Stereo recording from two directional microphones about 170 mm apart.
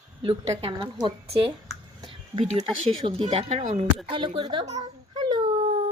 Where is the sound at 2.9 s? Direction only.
30° right (ahead or behind).